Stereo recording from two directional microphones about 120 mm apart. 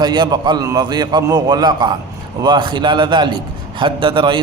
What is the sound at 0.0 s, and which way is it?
A man's voice, 35° right (ahead or behind).